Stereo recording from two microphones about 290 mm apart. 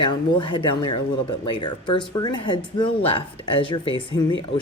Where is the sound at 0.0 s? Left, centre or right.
Centre.